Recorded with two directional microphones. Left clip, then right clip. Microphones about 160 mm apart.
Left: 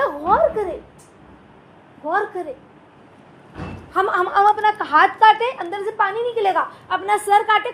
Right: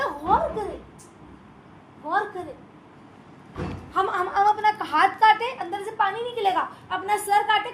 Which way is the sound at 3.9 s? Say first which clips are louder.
Left 5 dB; 30° left (ahead or behind).